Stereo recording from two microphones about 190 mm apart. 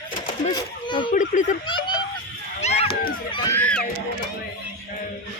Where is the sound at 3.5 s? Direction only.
5° left (ahead or behind).